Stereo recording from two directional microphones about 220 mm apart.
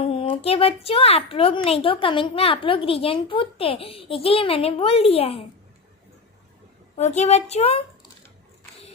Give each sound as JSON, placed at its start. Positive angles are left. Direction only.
{"t": 0.0, "sound": "a woman's voice", "side_deg": 25}
{"t": 7.0, "sound": "a woman's voice", "side_deg": 30}